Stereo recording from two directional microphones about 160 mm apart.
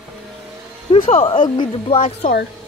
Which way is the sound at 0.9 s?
35° left (ahead or behind).